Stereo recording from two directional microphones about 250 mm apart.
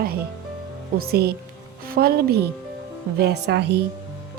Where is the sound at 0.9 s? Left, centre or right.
Right.